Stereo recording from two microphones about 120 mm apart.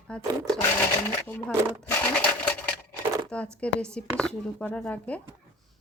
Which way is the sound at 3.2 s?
10° left (ahead or behind).